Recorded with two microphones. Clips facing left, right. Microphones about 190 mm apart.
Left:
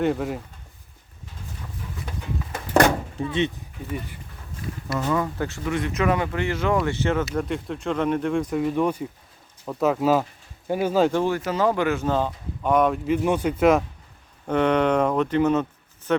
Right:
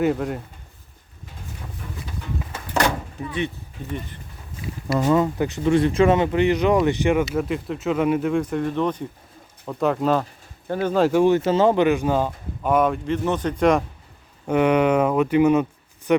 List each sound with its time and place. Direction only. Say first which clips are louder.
0.0 s speech: right 2 dB; centre (ahead or behind)
3.2 s speech: left 4 dB; 25° left (ahead or behind)
4.9 s speech: right 6 dB; 30° right (ahead or behind)
5.2 s speech: right 6 dB; 20° right (ahead or behind)
5.7 s speech: right 6 dB; 30° right (ahead or behind); by 7.3 s 15° right (ahead or behind)
7.3 s speech: right 2 dB; 5° right (ahead or behind)
11.1 s speech: right 6 dB; 15° right (ahead or behind)
11.3 s speech: right 5 dB; 25° right (ahead or behind); by 13.8 s 5° left (ahead or behind)
14.4 s speech: right 2 dB; 10° right (ahead or behind)